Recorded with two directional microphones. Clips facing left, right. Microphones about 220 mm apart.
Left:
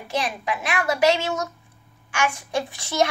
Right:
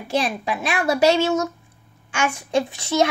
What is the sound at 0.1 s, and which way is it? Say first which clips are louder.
A woman's voice: right 3 dB; 30° right (ahead or behind).